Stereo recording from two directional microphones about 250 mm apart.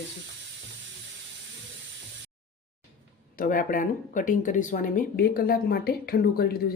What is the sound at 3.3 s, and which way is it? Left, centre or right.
Speech, left.